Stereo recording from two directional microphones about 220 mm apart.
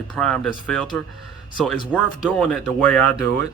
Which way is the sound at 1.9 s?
5° left (ahead or behind).